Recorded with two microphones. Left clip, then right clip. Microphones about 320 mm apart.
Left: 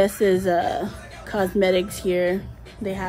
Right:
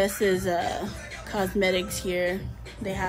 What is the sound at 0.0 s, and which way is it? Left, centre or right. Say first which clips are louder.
Speech: left 5 dB; left.